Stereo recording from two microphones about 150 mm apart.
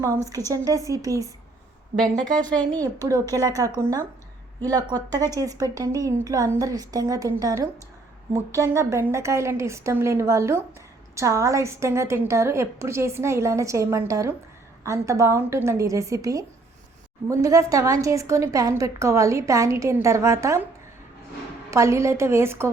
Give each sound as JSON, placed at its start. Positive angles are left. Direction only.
{"t": 0.0, "sound": "a woman's voice", "side_deg": -20}
{"t": 2.5, "sound": "speech", "side_deg": 10}
{"t": 2.8, "sound": "a woman's voice", "side_deg": -25}
{"t": 21.7, "sound": "a woman's voice", "side_deg": -20}